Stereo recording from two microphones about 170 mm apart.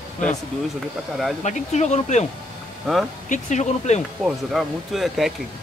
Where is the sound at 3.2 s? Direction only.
45° left (ahead or behind).